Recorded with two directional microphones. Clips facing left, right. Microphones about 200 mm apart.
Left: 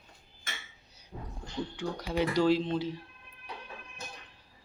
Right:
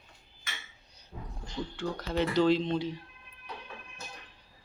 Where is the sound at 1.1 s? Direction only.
30° left (ahead or behind).